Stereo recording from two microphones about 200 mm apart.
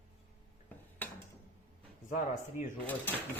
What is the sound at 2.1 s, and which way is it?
Speech, 40° left (ahead or behind).